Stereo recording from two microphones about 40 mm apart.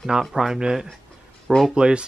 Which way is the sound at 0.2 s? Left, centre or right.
Centre.